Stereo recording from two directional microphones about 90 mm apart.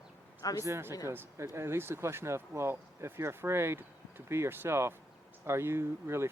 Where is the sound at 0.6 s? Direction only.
30° right (ahead or behind).